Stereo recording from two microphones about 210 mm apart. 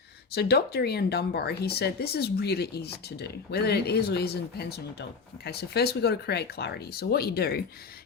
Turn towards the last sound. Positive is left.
turn(degrees=45)  # may be behind; listen again after turning